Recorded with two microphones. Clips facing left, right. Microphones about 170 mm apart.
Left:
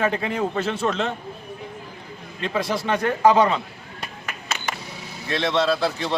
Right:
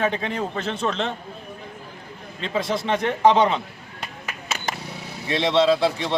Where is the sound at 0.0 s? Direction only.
5° left (ahead or behind).